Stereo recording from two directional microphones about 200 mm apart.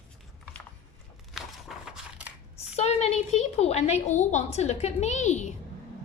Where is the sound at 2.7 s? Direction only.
30° left (ahead or behind).